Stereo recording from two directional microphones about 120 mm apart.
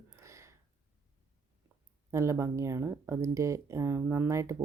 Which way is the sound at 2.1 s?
25° right (ahead or behind).